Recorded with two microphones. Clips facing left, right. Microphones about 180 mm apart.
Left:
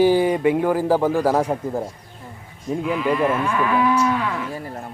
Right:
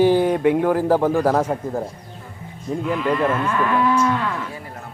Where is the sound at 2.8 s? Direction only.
5° left (ahead or behind).